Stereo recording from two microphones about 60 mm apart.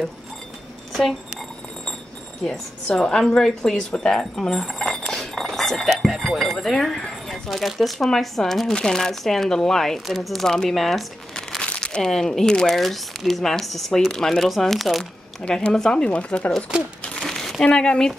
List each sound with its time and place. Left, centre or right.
2.4 s a woman's voice: centre
5.1 s chink: centre
5.9 s speech: centre
11.6 s speech: centre
15.4 s a woman's voice: centre
17.0 s crumpling: centre
17.6 s a woman's voice: centre